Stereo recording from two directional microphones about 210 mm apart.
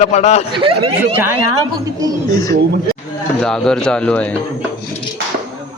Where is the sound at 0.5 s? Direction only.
25° right (ahead or behind).